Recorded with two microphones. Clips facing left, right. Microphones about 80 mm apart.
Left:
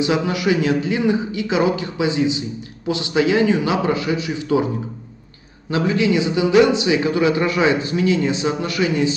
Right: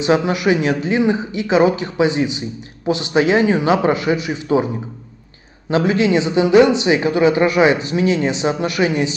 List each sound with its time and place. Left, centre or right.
0.0 s speech: right
5.7 s a man's voice: right